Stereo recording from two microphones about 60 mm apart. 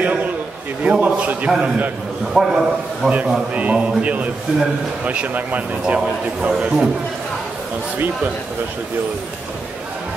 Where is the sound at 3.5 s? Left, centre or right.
Right.